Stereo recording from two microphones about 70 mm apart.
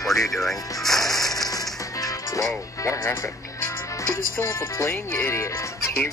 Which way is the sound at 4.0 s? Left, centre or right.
Left.